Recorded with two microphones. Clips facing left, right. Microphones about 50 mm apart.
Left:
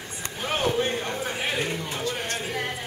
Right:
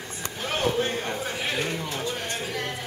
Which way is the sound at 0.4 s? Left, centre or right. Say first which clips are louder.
Left 1 dB; centre.